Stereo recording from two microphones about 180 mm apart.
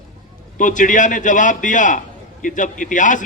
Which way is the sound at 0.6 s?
45° left (ahead or behind).